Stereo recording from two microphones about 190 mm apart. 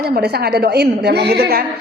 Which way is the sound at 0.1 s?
55° right (ahead or behind).